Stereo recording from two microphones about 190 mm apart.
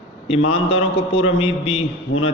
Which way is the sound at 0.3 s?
30° left (ahead or behind).